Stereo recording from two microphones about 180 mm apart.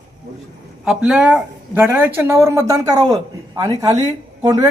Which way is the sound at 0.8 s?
5° right (ahead or behind).